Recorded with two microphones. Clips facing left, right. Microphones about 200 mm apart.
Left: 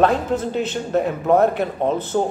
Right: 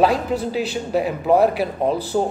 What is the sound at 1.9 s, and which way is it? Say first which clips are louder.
Speech: even; 35° right (ahead or behind).